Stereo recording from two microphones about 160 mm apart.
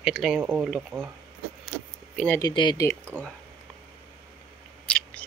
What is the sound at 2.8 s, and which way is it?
Speech, 15° left (ahead or behind).